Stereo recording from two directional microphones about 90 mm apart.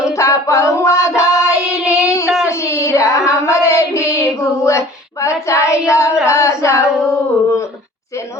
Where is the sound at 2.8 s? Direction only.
35° left (ahead or behind).